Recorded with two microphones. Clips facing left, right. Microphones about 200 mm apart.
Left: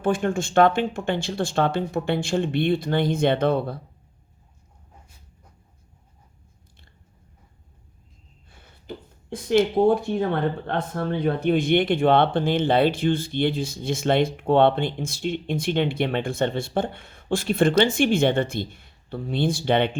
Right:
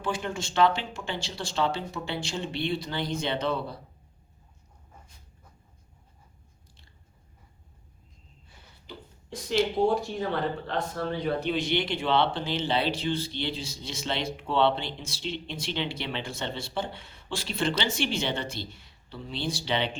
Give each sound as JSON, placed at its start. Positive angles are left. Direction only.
{"t": 0.0, "sound": "speech", "side_deg": 50}
{"t": 8.4, "sound": "speech", "side_deg": 55}